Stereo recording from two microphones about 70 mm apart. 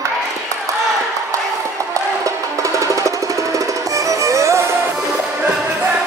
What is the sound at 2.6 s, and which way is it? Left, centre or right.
Music, right.